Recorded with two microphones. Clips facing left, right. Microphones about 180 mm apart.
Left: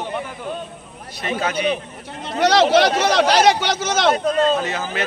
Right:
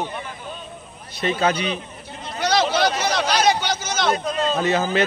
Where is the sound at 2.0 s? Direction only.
85° left.